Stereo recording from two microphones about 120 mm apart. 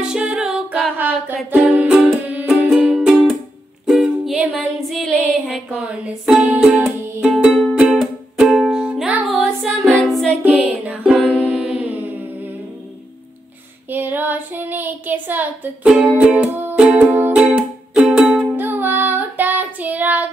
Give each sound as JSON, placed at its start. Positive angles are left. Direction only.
{"t": 0.1, "sound": "music", "side_deg": -10}
{"t": 5.7, "sound": "music", "side_deg": -10}
{"t": 10.4, "sound": "music", "side_deg": -10}
{"t": 13.8, "sound": "child singing", "side_deg": -15}
{"t": 16.9, "sound": "music", "side_deg": -15}
{"t": 18.6, "sound": "child singing", "side_deg": -15}